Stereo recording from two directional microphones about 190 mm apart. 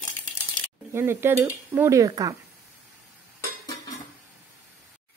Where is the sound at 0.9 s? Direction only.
10° right (ahead or behind).